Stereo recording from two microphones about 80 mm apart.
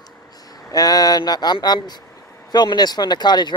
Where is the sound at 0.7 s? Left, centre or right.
Left.